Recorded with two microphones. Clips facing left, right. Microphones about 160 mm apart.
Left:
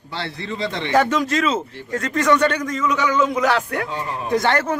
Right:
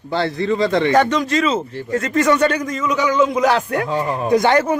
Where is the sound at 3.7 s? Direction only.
40° right (ahead or behind).